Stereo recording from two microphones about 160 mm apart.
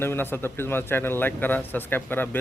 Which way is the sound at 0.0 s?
15° left (ahead or behind).